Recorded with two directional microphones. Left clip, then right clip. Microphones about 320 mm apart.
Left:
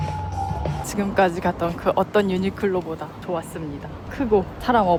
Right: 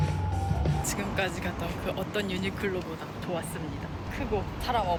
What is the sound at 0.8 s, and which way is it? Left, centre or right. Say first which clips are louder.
Speech: left 12 dB; left.